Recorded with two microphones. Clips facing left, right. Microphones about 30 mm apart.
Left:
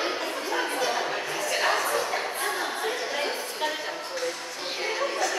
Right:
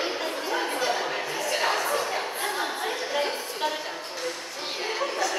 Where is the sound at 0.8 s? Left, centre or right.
Centre.